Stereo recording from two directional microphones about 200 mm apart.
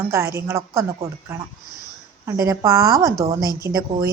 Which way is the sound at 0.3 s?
15° right (ahead or behind).